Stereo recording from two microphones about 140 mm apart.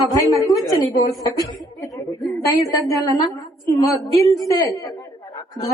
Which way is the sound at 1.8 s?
Centre (ahead or behind).